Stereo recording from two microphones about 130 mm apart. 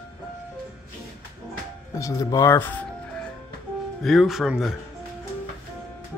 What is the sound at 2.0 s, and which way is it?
Speech, 25° left (ahead or behind).